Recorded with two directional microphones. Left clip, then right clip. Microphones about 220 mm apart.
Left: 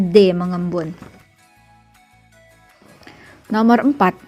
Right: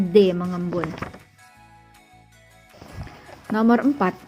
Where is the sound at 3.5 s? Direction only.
30° left (ahead or behind).